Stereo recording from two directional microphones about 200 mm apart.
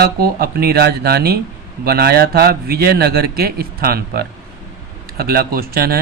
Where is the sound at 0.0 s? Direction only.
50° right (ahead or behind).